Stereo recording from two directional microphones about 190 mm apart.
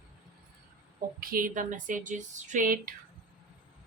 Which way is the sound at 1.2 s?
50° right (ahead or behind).